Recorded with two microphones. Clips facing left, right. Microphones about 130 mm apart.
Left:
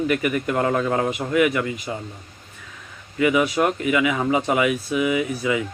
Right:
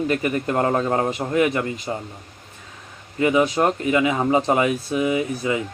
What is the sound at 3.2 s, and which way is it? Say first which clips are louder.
Speech: right 1 dB; 30° right (ahead or behind).